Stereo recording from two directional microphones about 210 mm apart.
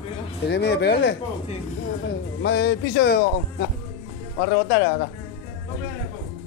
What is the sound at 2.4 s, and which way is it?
Speech, 55° left (ahead or behind).